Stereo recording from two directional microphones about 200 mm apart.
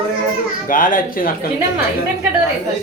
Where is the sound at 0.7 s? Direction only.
45° left (ahead or behind).